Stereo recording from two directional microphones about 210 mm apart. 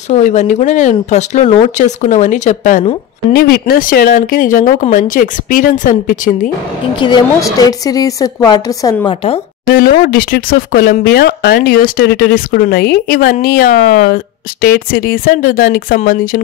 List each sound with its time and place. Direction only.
0.1 s speech: 35° left (ahead or behind)
3.3 s speech: 45° left (ahead or behind)
7.0 s a woman's voice: 20° left (ahead or behind)
9.7 s speech: 45° left (ahead or behind)